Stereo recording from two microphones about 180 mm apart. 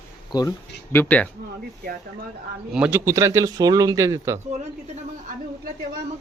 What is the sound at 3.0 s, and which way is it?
Speech, 20° right (ahead or behind).